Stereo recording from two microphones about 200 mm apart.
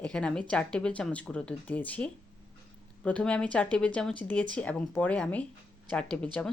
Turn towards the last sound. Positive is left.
turn(degrees=5)  # may be behind; listen again after turning